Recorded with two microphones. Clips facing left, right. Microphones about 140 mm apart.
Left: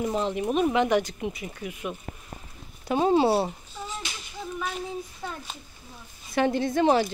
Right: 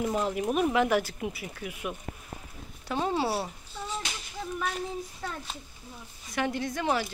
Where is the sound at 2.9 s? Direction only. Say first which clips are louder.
Left 7 dB; 20° left (ahead or behind).